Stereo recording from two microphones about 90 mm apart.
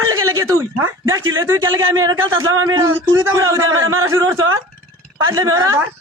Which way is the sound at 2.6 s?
40° right (ahead or behind).